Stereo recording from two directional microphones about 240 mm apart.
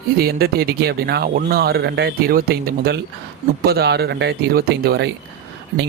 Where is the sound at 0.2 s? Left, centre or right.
Right.